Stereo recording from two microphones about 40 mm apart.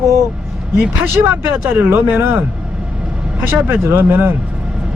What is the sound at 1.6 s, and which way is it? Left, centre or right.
Speech, right.